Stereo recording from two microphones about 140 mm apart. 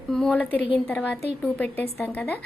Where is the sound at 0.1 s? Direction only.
5° left (ahead or behind).